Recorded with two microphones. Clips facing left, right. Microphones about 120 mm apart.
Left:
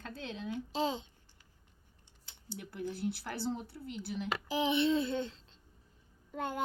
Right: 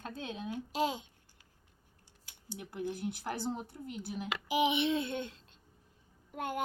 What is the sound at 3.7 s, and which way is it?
Speech, 45° right (ahead or behind).